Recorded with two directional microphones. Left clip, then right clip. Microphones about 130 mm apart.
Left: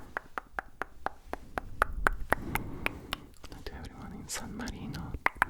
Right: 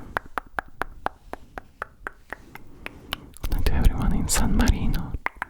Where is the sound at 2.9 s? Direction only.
25° left (ahead or behind).